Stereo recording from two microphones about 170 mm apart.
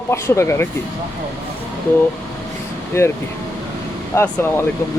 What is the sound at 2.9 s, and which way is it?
Speech, 15° left (ahead or behind).